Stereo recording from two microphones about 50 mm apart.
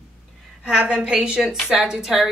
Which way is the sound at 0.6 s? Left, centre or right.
Right.